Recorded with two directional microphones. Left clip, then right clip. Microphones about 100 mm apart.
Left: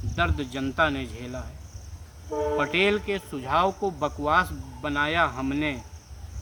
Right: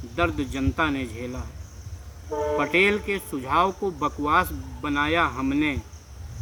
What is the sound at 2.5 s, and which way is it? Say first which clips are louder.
Speech: right 3 dB; 25° left (ahead or behind).